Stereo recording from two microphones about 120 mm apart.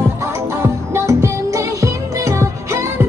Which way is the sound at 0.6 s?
20° right (ahead or behind).